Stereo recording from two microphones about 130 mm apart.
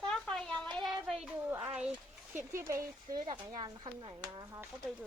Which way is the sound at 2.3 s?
20° right (ahead or behind).